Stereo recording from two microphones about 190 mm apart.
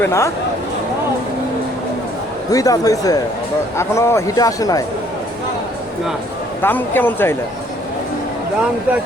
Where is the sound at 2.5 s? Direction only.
20° left (ahead or behind).